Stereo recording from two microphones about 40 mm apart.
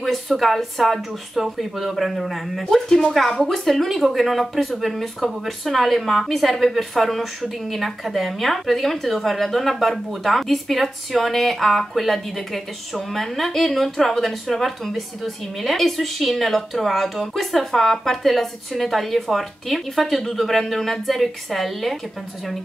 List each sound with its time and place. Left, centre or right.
0.3 s speech: centre
2.7 s speech: centre